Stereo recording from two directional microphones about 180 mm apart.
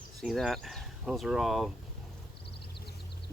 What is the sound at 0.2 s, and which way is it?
Speech, centre (ahead or behind).